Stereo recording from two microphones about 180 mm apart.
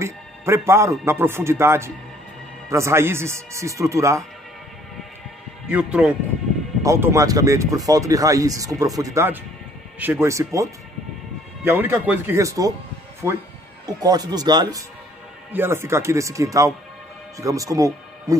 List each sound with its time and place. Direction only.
0.0 s a man's voice: 15° right (ahead or behind)
5.7 s a man's voice: 5° right (ahead or behind)